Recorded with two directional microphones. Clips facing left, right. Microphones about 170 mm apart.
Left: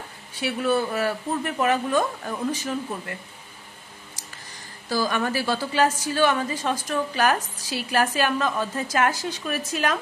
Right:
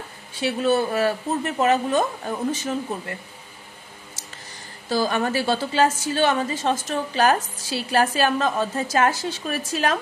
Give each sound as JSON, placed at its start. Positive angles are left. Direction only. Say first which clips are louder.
{"t": 0.4, "sound": "a woman's voice", "louder": "right 3 dB", "side_deg": -25}
{"t": 4.8, "sound": "a woman's voice", "louder": "right 2 dB", "side_deg": -25}